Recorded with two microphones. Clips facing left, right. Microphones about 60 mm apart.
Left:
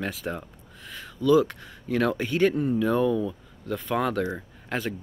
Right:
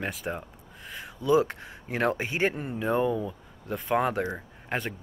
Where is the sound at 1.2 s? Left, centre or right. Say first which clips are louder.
Left 3 dB; right.